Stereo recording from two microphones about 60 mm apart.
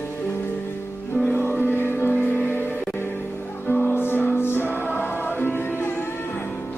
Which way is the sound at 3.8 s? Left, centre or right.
Left.